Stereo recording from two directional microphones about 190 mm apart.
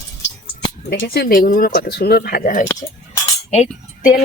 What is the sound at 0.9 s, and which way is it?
A woman's voice, 55° left (ahead or behind).